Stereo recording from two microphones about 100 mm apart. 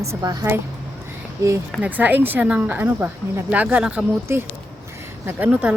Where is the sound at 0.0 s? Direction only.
35° right (ahead or behind).